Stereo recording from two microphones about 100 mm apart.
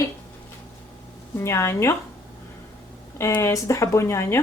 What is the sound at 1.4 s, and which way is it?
Speech, 25° left (ahead or behind).